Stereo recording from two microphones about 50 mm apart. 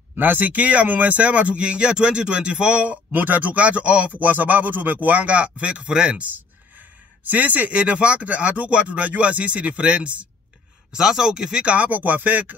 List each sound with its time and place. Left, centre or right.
0.1 s speech: right
3.2 s speech: right; by 6.2 s centre
7.2 s speech: right
10.9 s speech: centre; by 12.5 s right